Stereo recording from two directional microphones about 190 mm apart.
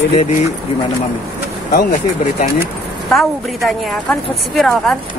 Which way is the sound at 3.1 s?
Centre (ahead or behind).